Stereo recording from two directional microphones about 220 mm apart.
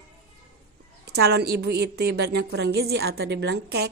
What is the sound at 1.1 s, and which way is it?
A woman's voice, 45° right (ahead or behind).